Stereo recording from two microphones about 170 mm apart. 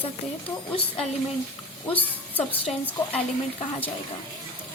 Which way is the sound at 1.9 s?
10° left (ahead or behind).